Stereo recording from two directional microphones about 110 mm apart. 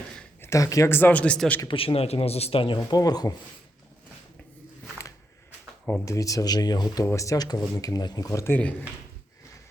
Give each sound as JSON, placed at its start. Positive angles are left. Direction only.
{"t": 0.4, "sound": "speech", "side_deg": 30}
{"t": 1.6, "sound": "speech", "side_deg": 55}
{"t": 2.7, "sound": "speech", "side_deg": 35}
{"t": 6.1, "sound": "speech", "side_deg": 30}
{"t": 8.4, "sound": "speech", "side_deg": 15}